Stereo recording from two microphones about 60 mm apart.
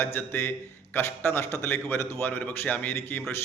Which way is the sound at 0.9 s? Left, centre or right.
Left.